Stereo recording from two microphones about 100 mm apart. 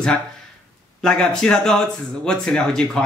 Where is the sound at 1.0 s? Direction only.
5° left (ahead or behind).